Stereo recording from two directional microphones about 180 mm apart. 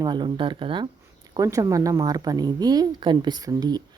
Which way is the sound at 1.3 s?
20° right (ahead or behind).